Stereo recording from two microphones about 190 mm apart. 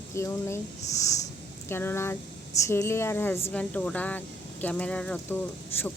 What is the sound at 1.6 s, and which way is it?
Speech, 10° left (ahead or behind).